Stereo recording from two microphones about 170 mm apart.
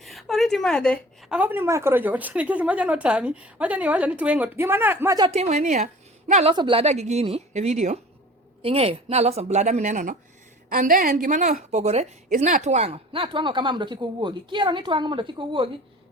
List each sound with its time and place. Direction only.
0.0 s speech: centre (ahead or behind)
1.3 s a woman's voice: 10° right (ahead or behind)
5.3 s a woman's voice: 40° right (ahead or behind)
6.5 s a woman's voice: 30° right (ahead or behind)